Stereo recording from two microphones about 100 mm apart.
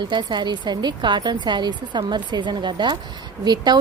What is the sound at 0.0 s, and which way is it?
Speech, 50° right (ahead or behind).